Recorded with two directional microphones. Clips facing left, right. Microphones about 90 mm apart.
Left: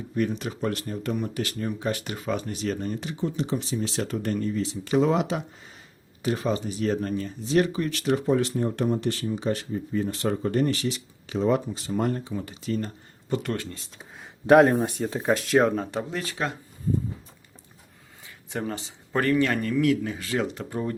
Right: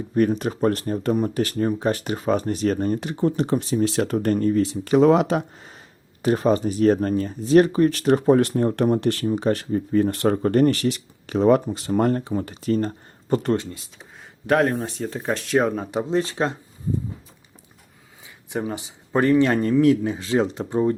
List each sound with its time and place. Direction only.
0.1 s speech: 45° right (ahead or behind)
6.2 s speech: 45° right (ahead or behind)
13.3 s speech: 35° right (ahead or behind)
14.4 s speech: 15° left (ahead or behind); by 16.0 s 10° right (ahead or behind)
16.0 s speech: 25° right (ahead or behind)
18.5 s speech: 15° right (ahead or behind)